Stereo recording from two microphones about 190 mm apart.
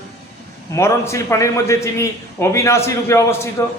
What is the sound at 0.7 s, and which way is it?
A man's voice, 15° left (ahead or behind).